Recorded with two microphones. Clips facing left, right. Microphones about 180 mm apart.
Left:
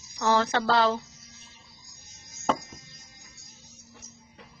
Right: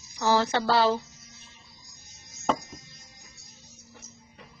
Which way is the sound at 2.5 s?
Centre (ahead or behind).